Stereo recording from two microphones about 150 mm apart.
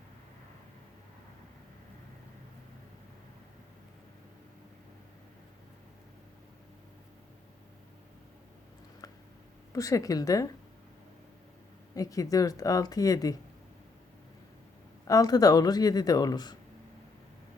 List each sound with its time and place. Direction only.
9.7 s speech: 25° left (ahead or behind)
11.9 s speech: 25° left (ahead or behind)
15.0 s speech: 25° left (ahead or behind)